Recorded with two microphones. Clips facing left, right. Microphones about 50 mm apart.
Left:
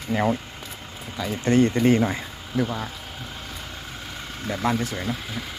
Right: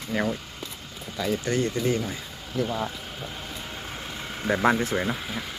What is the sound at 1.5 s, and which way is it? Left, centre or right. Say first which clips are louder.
Speech: left 10 dB; left.